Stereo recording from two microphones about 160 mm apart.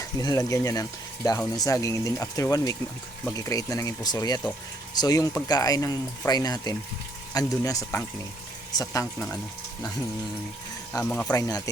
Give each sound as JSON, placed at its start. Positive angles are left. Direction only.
{"t": 0.0, "sound": "speech", "side_deg": 25}
{"t": 10.9, "sound": "speech", "side_deg": 10}
{"t": 11.3, "sound": "speech", "side_deg": 20}